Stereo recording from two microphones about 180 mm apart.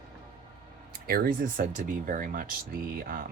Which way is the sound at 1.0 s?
55° right (ahead or behind).